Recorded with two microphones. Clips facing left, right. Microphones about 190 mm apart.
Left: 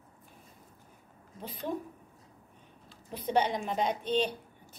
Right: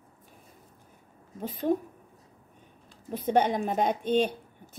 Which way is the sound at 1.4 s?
50° right (ahead or behind).